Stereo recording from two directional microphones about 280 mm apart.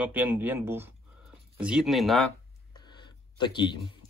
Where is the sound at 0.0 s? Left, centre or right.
Centre.